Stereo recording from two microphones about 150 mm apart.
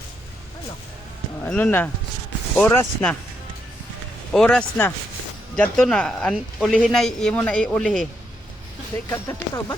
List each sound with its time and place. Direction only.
1.5 s speech: 10° left (ahead or behind)
4.3 s a man's voice: 5° left (ahead or behind)
9.0 s speech: 15° left (ahead or behind)